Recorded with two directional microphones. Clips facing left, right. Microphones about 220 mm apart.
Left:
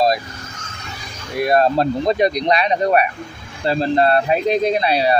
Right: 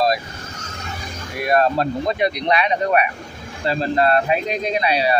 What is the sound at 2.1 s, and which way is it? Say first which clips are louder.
Speech: left 3 dB; 40° left (ahead or behind).